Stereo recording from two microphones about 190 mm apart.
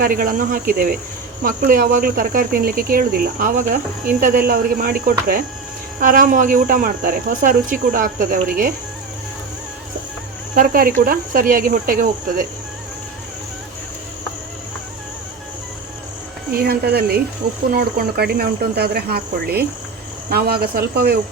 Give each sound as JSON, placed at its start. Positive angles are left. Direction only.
{"t": 0.0, "sound": "speech", "side_deg": -50}
{"t": 10.5, "sound": "speech", "side_deg": -50}
{"t": 16.5, "sound": "speech", "side_deg": -55}